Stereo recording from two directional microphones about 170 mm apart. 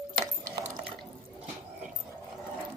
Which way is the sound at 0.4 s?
45° right (ahead or behind).